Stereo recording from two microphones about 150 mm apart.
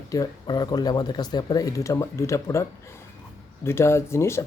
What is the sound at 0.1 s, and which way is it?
Speech, 25° left (ahead or behind).